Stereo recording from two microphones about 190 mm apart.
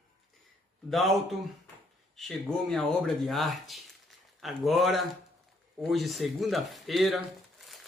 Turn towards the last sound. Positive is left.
turn(degrees=0)  # may be behind; listen again after turning